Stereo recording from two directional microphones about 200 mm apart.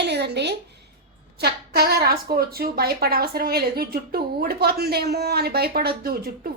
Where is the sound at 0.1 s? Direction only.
55° right (ahead or behind).